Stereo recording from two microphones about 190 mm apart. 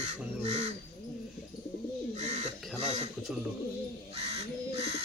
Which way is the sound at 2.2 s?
35° right (ahead or behind).